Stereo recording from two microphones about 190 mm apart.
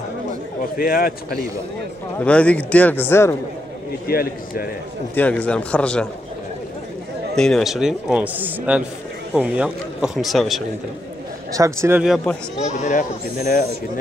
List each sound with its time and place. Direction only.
0.7 s a man's voice: 50° left (ahead or behind)
2.1 s a man's voice: 5° left (ahead or behind)
4.1 s a man's voice: 50° left (ahead or behind)
5.1 s a man's voice: 5° left (ahead or behind)
7.3 s a man's voice: 5° left (ahead or behind)
11.5 s speech: 15° right (ahead or behind)
12.0 s a man's voice: centre (ahead or behind)
12.6 s speech: 40° left (ahead or behind)